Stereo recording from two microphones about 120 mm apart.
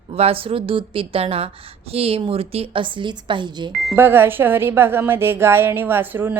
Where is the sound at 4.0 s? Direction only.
20° right (ahead or behind).